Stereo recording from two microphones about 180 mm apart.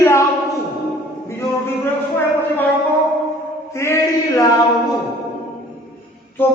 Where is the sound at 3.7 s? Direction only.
15° left (ahead or behind).